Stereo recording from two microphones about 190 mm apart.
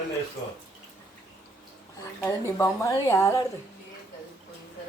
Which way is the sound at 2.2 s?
15° left (ahead or behind).